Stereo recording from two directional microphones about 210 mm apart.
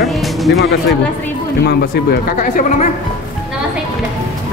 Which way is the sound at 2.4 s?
40° left (ahead or behind).